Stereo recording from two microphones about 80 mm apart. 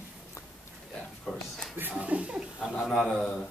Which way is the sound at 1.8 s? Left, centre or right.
Right.